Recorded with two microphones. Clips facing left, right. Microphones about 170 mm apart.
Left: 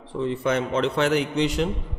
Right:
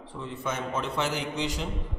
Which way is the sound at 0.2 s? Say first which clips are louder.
Left 9 dB; 70° left (ahead or behind).